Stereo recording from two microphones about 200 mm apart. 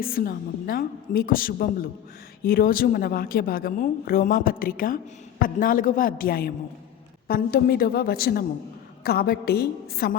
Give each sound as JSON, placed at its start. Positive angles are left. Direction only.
{"t": 0.0, "sound": "a woman's voice", "side_deg": 45}